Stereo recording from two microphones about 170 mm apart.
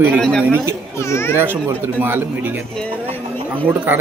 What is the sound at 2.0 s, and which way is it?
Speech, 10° right (ahead or behind).